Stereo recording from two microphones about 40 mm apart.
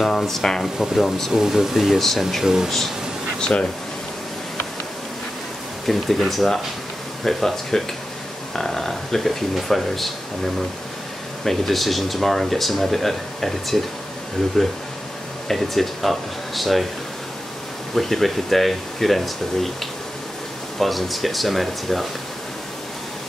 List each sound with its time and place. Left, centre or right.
0.0 s speech: centre
1.3 s speech: centre
2.0 s speech: centre
2.4 s speech: centre
3.3 s speech: centre
5.9 s speech: centre
15.4 s speech: centre
17.9 s speech: centre
20.8 s speech: centre